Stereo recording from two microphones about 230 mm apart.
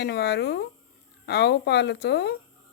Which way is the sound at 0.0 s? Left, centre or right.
Left.